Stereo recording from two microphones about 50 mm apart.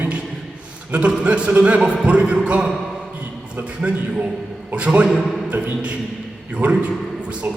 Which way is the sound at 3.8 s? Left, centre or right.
Right.